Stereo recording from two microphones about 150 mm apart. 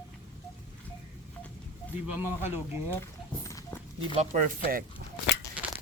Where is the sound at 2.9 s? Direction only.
20° left (ahead or behind).